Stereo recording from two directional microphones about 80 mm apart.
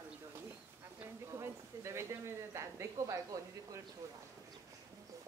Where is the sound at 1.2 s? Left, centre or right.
Right.